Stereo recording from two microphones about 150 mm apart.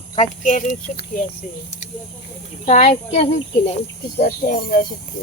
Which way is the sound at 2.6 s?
50° left (ahead or behind).